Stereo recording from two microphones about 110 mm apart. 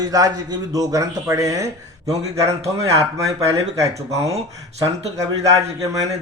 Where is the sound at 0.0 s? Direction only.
35° right (ahead or behind).